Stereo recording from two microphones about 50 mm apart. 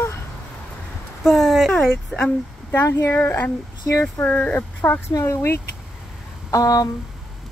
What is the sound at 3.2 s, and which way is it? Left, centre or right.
A woman's voice, left.